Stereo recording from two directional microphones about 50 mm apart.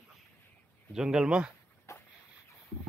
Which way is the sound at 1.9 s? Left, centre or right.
Left.